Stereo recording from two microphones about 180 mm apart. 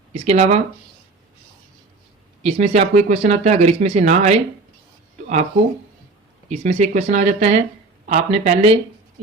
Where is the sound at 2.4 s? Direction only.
35° right (ahead or behind).